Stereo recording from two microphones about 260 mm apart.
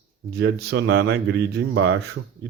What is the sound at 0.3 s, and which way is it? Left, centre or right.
Speech, right.